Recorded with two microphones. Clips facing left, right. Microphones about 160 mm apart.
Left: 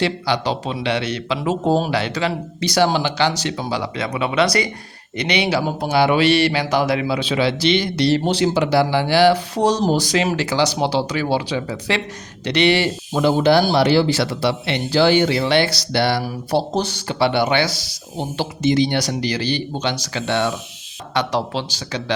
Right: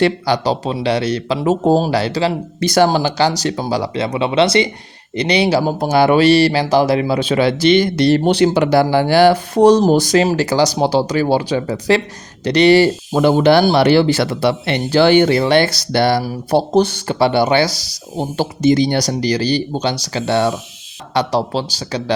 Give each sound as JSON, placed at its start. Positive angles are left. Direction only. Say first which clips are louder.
{"t": 0.0, "sound": "speech", "louder": "right 5 dB", "side_deg": -40}
{"t": 2.6, "sound": "speech", "louder": "right 4 dB", "side_deg": -50}
{"t": 13.2, "sound": "speech", "louder": "right 4 dB", "side_deg": -65}